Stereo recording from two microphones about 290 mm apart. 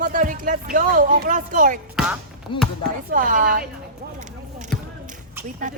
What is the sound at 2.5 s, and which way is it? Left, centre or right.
Speech, centre.